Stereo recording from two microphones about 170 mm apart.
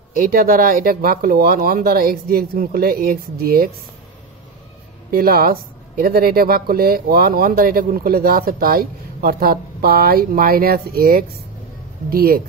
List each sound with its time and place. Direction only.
0.2 s speech: 55° right (ahead or behind)
5.1 s speech: 60° right (ahead or behind)